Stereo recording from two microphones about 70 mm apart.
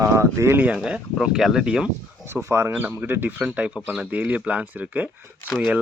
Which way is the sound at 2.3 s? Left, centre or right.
Right.